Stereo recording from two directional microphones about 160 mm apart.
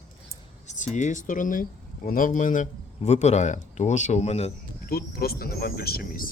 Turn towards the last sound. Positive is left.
turn(degrees=65)  # may be behind; listen again after turning